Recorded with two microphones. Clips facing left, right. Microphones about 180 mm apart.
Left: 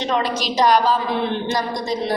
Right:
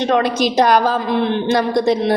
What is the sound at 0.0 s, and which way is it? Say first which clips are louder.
A woman's voice: right 6 dB; 55° right (ahead or behind).